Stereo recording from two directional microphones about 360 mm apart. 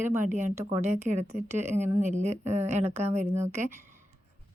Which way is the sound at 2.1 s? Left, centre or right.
Centre.